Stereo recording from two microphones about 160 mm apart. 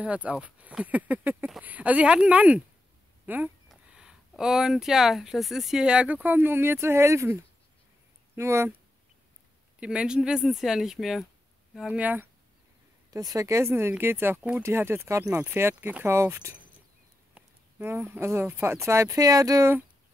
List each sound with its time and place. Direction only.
0.0 s speech: 10° right (ahead or behind)
8.4 s speech: 15° right (ahead or behind)
9.8 s speech: 5° right (ahead or behind)
13.1 s speech: 20° right (ahead or behind)